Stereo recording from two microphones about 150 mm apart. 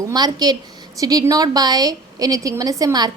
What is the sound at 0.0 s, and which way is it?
A woman's voice, 25° right (ahead or behind).